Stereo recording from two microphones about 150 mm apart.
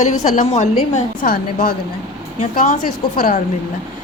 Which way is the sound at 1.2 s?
70° left (ahead or behind).